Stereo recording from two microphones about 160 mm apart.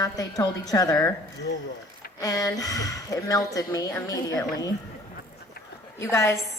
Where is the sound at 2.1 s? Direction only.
20° left (ahead or behind).